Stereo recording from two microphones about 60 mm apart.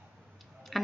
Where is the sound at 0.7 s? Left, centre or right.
Centre.